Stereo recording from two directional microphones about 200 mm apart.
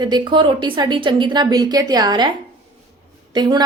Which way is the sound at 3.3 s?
20° right (ahead or behind).